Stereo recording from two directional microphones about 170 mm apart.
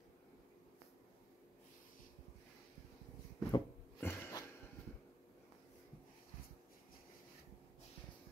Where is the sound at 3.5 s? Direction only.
15° left (ahead or behind).